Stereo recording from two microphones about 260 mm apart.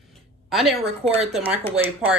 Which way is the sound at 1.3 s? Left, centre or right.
Centre.